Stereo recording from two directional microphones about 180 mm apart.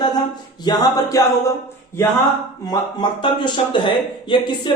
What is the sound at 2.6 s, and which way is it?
A woman's voice, 25° left (ahead or behind).